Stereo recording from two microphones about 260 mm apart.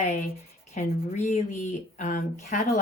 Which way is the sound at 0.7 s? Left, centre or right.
Left.